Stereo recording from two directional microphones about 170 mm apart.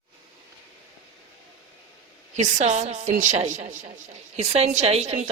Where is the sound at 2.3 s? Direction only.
45° right (ahead or behind).